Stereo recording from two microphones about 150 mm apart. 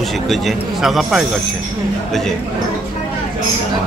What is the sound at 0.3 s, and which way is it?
Speech, centre (ahead or behind).